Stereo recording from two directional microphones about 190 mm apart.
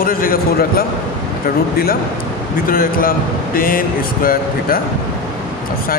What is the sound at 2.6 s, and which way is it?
Speech, 50° left (ahead or behind).